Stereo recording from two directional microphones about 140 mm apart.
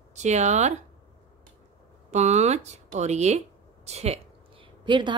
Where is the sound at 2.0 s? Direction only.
55° right (ahead or behind).